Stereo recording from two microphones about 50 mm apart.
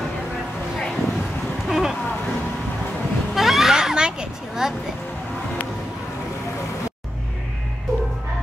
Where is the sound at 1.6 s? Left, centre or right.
Centre.